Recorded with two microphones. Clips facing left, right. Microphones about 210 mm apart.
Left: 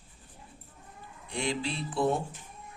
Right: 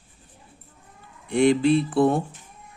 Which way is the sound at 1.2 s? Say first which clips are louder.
Right 15 dB; 55° right (ahead or behind).